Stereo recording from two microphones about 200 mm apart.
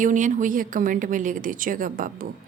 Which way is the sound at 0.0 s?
40° right (ahead or behind).